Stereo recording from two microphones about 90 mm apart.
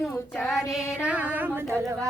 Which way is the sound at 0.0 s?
5° left (ahead or behind).